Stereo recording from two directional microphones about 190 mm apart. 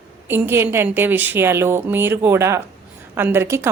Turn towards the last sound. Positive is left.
turn(degrees=-15)  # may be behind; listen again after turning